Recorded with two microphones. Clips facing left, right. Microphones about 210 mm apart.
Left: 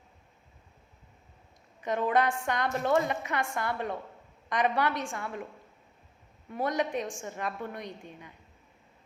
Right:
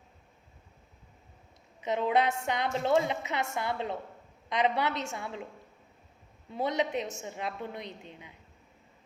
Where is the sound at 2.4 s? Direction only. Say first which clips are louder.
Even; 10° right (ahead or behind).